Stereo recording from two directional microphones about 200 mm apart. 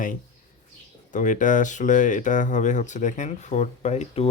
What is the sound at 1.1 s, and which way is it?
Speech, 40° left (ahead or behind).